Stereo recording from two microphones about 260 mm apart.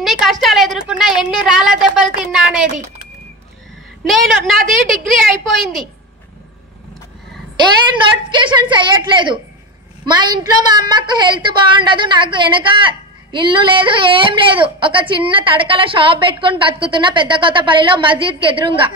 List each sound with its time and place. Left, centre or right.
0.0 s a woman's voice: centre
4.0 s a woman's voice: centre
8.3 s a woman's voice: centre